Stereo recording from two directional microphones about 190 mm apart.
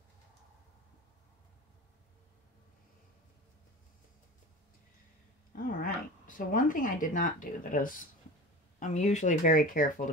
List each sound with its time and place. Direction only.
5.7 s speech: 45° left (ahead or behind)